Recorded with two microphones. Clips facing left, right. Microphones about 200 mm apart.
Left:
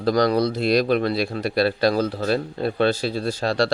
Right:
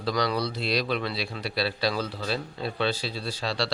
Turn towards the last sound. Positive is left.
turn(degrees=50)  # may be behind; listen again after turning